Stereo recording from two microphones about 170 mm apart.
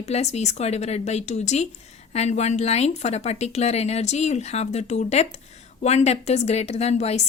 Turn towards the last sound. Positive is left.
turn(degrees=40)  # may be behind; listen again after turning